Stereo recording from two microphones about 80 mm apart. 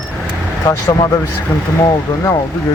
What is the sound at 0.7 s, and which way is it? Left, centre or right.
Speech, left.